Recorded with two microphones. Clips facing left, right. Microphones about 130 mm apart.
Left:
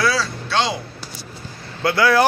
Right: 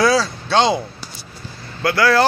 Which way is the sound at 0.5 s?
20° right (ahead or behind).